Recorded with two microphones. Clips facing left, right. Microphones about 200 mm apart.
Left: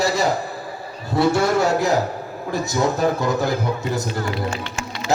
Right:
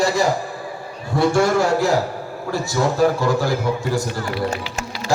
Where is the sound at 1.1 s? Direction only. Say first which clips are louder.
Right 1 dB; 25° left (ahead or behind).